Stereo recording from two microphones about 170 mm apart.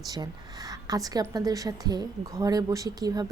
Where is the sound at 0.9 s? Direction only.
20° right (ahead or behind).